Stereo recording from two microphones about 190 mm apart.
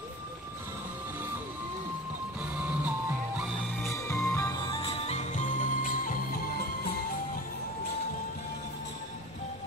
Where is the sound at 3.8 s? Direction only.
15° left (ahead or behind).